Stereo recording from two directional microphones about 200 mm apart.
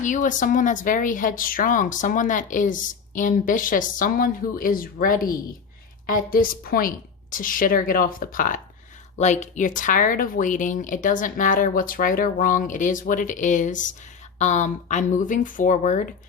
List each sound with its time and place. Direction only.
0.0 s a woman's voice: 40° left (ahead or behind)